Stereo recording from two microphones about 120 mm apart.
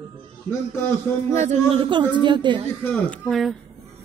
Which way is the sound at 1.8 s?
40° right (ahead or behind).